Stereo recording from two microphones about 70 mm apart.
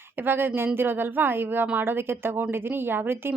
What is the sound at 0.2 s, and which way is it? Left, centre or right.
A woman's voice, right.